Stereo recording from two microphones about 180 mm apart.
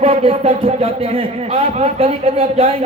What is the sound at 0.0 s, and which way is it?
Speech, 35° right (ahead or behind).